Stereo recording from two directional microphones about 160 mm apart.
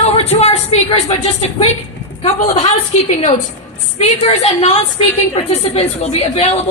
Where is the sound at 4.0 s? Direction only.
40° left (ahead or behind).